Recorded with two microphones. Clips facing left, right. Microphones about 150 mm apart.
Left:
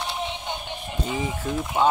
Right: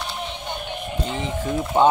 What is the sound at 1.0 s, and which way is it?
Speech, 5° left (ahead or behind).